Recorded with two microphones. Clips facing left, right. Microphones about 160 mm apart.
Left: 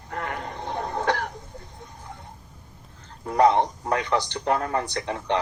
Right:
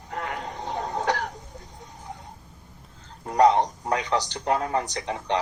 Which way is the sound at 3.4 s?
15° right (ahead or behind).